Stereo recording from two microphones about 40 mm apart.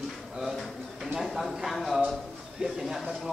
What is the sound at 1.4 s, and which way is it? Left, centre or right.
Speech, centre.